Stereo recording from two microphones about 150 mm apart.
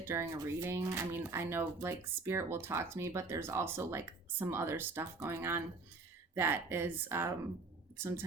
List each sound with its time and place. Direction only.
0.0 s speech: 15° right (ahead or behind)